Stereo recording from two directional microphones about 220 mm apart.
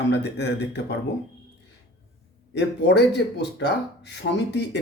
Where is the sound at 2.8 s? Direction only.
50° left (ahead or behind).